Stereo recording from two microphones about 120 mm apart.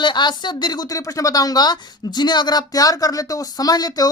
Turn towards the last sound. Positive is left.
turn(degrees=30)  # may be behind; listen again after turning